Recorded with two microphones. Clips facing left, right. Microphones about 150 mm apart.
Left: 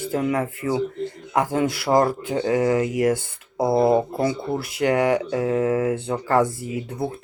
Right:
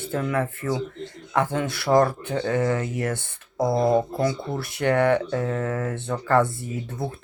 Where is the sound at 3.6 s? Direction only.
25° left (ahead or behind).